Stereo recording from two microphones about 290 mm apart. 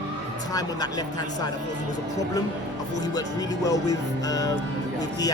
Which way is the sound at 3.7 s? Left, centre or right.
Centre.